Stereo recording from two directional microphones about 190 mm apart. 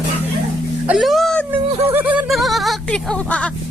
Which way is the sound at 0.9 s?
Centre (ahead or behind).